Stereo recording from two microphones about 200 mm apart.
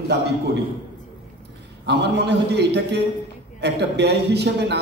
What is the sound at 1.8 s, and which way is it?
A man's voice, 55° right (ahead or behind).